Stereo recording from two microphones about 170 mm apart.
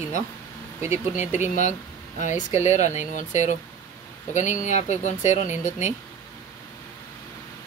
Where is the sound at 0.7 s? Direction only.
15° right (ahead or behind).